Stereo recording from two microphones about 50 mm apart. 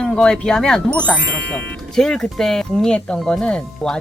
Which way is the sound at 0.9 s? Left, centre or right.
Left.